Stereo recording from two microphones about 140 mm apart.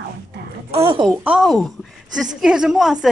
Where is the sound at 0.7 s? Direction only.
35° right (ahead or behind).